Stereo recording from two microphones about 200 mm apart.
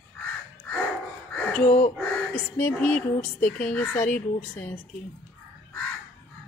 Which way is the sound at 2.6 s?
5° left (ahead or behind).